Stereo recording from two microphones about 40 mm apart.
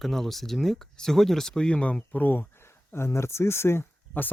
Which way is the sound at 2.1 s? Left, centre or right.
Left.